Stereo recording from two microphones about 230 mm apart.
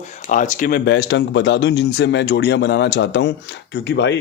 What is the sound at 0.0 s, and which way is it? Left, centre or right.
Speech, left.